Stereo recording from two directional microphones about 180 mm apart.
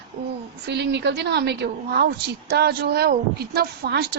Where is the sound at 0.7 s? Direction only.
70° right (ahead or behind).